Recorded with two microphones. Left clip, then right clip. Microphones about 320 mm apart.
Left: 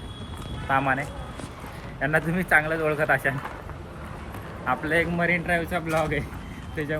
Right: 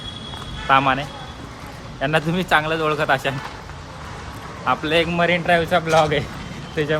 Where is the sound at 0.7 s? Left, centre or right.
Right.